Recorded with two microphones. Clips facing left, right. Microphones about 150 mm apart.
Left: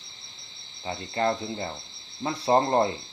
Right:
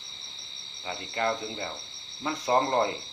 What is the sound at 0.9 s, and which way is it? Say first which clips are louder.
Speech: left 3 dB; 30° left (ahead or behind).